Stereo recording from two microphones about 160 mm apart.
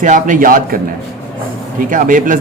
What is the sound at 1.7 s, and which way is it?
Speech, 55° right (ahead or behind).